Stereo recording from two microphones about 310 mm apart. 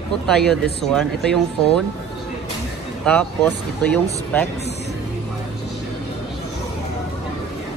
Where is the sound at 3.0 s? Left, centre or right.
Centre.